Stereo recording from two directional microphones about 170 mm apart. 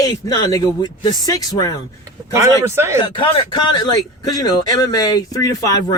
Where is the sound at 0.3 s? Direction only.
25° left (ahead or behind).